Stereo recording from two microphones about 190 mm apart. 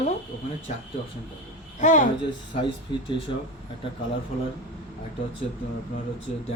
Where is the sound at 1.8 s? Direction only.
40° left (ahead or behind).